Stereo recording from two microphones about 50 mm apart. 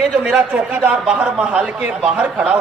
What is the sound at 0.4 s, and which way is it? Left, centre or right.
A man's voice, right.